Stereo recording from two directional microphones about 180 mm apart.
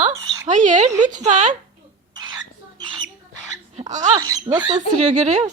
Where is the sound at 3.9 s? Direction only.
40° right (ahead or behind).